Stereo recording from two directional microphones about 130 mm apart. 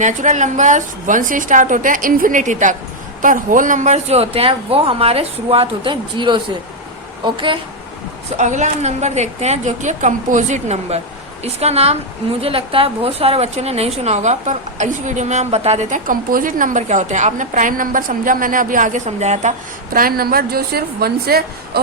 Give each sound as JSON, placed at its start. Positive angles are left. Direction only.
{"t": 0.0, "sound": "a woman's voice", "side_deg": -70}
{"t": 3.2, "sound": "speech", "side_deg": -90}
{"t": 8.4, "sound": "a woman's voice", "side_deg": -65}